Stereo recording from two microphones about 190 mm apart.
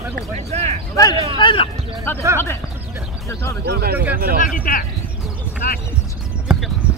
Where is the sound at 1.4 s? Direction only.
25° left (ahead or behind).